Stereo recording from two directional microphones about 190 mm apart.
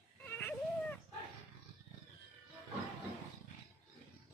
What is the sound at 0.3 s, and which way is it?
Dog, 10° left (ahead or behind).